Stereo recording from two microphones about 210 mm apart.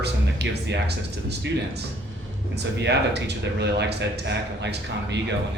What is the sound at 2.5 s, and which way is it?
Speech, 55° right (ahead or behind).